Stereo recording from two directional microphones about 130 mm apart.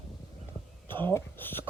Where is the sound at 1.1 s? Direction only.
15° left (ahead or behind).